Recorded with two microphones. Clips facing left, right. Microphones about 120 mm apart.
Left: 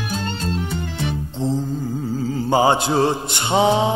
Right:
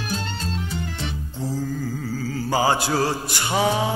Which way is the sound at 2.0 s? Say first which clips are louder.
Left 7 dB; 25° left (ahead or behind).